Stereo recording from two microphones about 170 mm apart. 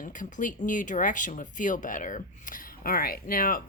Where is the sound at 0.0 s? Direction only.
50° left (ahead or behind).